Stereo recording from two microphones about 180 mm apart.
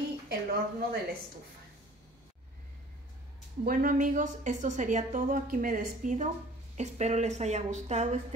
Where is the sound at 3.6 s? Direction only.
50° right (ahead or behind).